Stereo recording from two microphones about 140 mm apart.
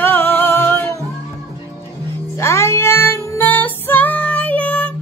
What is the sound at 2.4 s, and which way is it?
Child singing, 20° left (ahead or behind).